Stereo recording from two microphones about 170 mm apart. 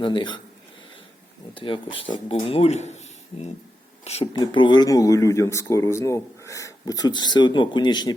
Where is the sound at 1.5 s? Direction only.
30° left (ahead or behind).